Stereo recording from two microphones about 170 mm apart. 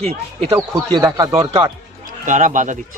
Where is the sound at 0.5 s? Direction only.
20° right (ahead or behind).